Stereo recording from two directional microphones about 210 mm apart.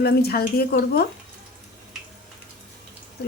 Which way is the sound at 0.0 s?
50° left (ahead or behind).